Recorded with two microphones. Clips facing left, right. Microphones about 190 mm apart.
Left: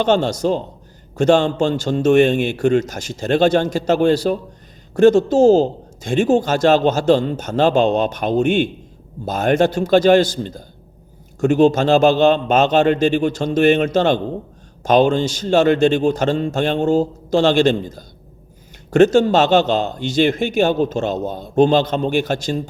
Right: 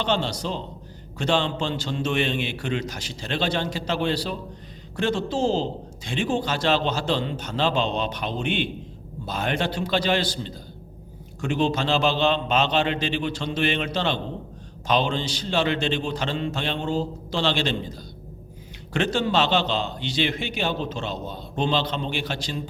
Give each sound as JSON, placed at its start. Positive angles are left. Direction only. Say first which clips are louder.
{"t": 0.0, "sound": "a man's voice", "louder": "left 9 dB", "side_deg": 45}